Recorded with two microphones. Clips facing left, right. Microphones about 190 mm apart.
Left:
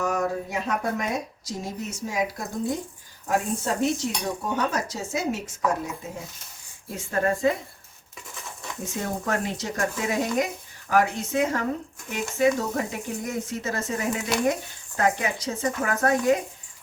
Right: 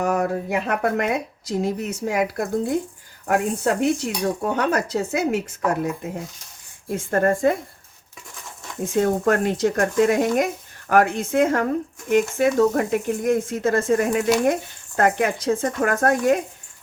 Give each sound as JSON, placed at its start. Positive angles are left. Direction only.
{"t": 0.0, "sound": "a woman's voice", "side_deg": -60}
{"t": 8.8, "sound": "speech", "side_deg": -55}